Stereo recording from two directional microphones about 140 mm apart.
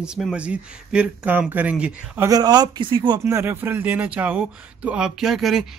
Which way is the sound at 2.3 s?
30° right (ahead or behind).